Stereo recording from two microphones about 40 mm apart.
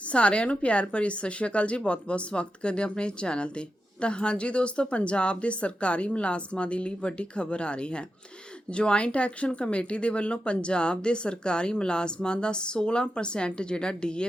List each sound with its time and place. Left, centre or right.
0.0 s a woman's voice: left